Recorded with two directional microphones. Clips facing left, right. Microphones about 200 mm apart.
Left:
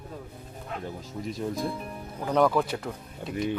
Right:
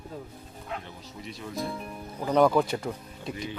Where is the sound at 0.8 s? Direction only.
45° left (ahead or behind).